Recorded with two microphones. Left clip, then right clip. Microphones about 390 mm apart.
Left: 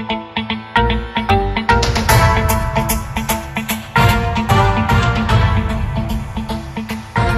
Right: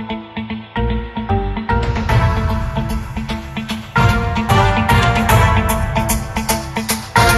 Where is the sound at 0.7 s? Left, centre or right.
Left.